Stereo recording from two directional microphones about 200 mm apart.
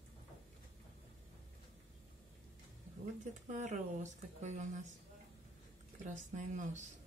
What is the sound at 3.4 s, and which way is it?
Speech, 40° right (ahead or behind).